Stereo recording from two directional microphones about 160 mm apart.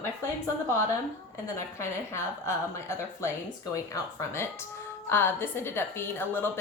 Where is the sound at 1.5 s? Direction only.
15° left (ahead or behind).